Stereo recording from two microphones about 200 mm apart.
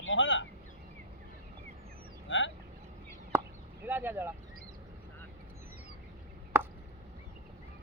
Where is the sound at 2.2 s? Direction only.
70° left (ahead or behind).